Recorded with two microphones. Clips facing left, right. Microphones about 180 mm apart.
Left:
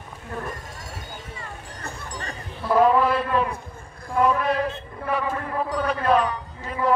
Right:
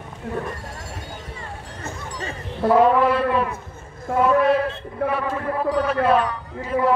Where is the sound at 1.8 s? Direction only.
20° right (ahead or behind).